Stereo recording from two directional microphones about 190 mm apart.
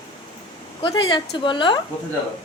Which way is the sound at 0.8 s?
25° left (ahead or behind).